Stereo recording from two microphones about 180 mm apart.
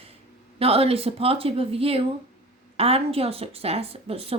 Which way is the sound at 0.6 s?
35° right (ahead or behind).